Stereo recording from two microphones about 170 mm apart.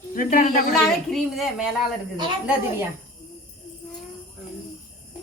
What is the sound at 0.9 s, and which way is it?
Speech, centre (ahead or behind).